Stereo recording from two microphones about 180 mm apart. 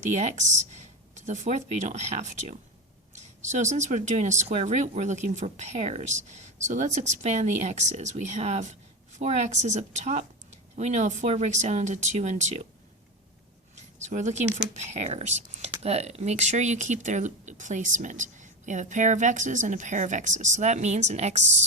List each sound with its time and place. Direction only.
0.1 s speech: 40° right (ahead or behind)
14.0 s speech: 40° right (ahead or behind)